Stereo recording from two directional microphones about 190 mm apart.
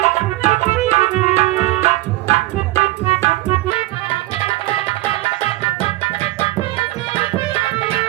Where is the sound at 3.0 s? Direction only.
35° left (ahead or behind).